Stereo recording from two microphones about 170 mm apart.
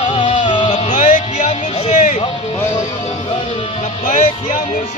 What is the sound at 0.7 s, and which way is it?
Music, 45° left (ahead or behind).